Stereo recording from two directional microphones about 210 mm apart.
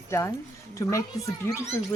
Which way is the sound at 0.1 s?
10° left (ahead or behind).